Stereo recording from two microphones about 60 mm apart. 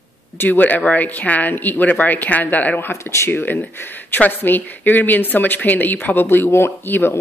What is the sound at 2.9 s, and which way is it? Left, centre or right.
Speech, left.